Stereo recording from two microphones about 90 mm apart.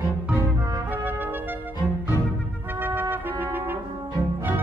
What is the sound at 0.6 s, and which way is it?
Music, 45° right (ahead or behind).